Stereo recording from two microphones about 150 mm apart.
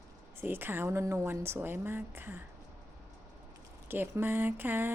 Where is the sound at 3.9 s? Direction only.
15° right (ahead or behind).